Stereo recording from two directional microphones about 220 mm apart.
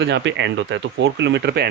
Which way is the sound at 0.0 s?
55° right (ahead or behind).